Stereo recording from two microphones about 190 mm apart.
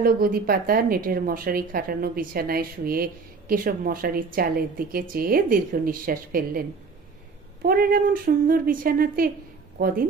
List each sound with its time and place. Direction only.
0.0 s a woman's voice: 50° right (ahead or behind)
7.6 s a woman's voice: 50° right (ahead or behind)